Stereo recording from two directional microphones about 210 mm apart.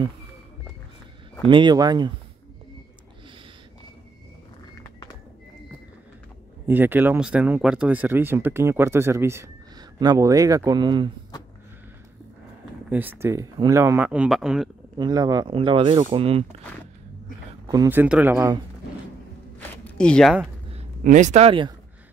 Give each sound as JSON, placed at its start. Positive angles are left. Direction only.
{"t": 1.4, "sound": "speech", "side_deg": -20}
{"t": 6.7, "sound": "speech", "side_deg": -10}
{"t": 12.9, "sound": "speech", "side_deg": -10}
{"t": 15.0, "sound": "speech", "side_deg": -20}
{"t": 17.6, "sound": "speech", "side_deg": -15}
{"t": 19.7, "sound": "zipper", "side_deg": 5}
{"t": 21.0, "sound": "speech", "side_deg": -35}